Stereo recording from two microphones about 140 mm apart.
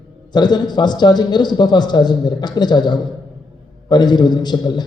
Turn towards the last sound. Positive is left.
turn(degrees=30)  # may be behind; listen again after turning